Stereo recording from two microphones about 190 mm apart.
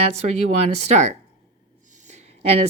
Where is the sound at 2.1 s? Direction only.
30° right (ahead or behind).